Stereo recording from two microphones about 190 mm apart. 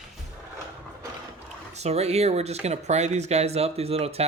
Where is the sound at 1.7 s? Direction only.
35° right (ahead or behind).